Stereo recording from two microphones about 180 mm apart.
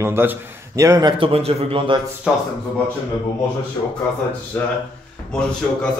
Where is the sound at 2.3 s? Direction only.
5° right (ahead or behind).